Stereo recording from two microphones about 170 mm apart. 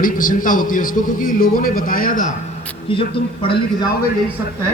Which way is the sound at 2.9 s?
30° left (ahead or behind).